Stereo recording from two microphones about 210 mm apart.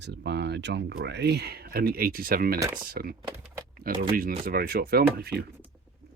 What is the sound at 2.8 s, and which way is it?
Speech, 45° right (ahead or behind).